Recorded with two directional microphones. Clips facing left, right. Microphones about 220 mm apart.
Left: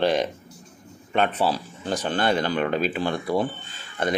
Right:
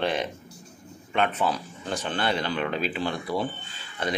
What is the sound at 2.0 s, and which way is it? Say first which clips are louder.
Speech: left 4 dB; 45° left (ahead or behind).